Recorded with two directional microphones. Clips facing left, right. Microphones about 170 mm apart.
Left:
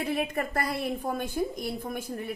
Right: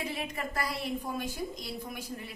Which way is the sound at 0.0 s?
55° left (ahead or behind).